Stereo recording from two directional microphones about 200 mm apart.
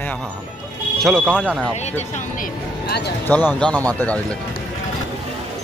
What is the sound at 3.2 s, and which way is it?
Speech, 10° left (ahead or behind).